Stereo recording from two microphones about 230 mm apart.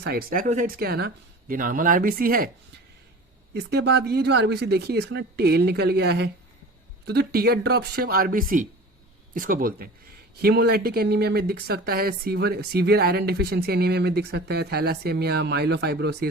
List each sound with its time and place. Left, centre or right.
0.0 s speech: right
3.5 s speech: right